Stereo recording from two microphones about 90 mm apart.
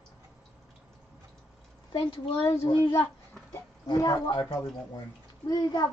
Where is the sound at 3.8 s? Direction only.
45° left (ahead or behind).